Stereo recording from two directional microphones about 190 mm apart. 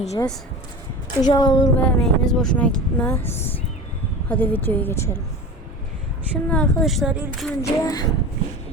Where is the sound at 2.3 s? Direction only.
5° left (ahead or behind).